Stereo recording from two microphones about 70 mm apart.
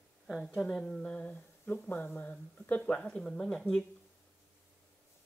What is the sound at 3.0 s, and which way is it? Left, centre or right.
Speech, centre.